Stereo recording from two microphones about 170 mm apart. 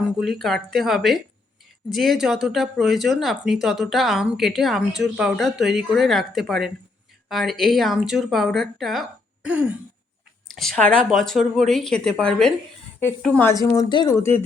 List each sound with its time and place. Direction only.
0.2 s speech: centre (ahead or behind)
10.5 s speech: centre (ahead or behind); by 14.3 s 25° left (ahead or behind)